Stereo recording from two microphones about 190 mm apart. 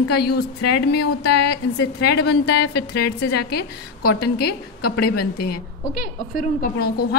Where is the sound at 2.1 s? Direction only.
60° left (ahead or behind).